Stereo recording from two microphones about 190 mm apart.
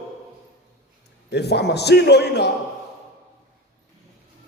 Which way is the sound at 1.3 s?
60° left (ahead or behind).